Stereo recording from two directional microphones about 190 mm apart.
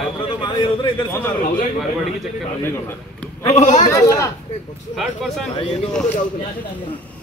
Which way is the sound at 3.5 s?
40° left (ahead or behind).